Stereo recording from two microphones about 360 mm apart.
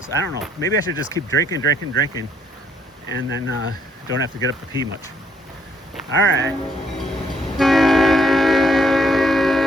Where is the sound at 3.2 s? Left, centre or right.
Right.